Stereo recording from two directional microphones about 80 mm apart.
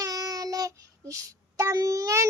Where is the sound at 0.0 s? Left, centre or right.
Right.